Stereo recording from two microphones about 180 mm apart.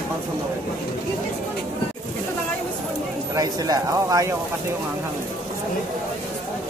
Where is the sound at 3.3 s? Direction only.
20° right (ahead or behind).